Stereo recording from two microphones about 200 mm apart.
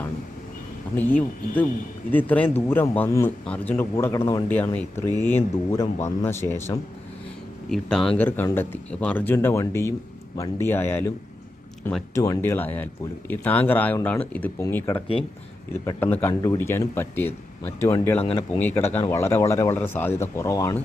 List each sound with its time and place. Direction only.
0.9 s a man's voice: 10° left (ahead or behind)
5.0 s speech: 20° right (ahead or behind)
5.3 s a man's voice: 15° left (ahead or behind)
12.1 s a man's voice: 15° left (ahead or behind)
18.2 s speech: 30° left (ahead or behind)
18.6 s a man's voice: 10° left (ahead or behind)